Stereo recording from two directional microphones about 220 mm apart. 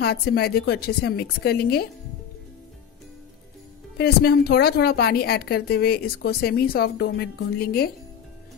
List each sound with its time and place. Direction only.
0.0 s a woman's voice: 45° left (ahead or behind)
4.0 s a woman's voice: 45° left (ahead or behind)